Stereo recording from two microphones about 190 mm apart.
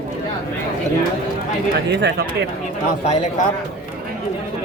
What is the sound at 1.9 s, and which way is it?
Speech, 65° right (ahead or behind).